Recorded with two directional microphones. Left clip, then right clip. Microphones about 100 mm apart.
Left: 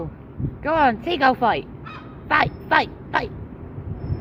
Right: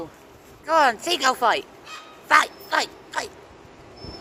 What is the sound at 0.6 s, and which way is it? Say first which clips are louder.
Speech: even; 15° right (ahead or behind).